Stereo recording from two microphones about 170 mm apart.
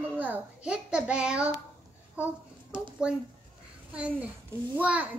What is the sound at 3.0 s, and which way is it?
A child's voice, 5° right (ahead or behind).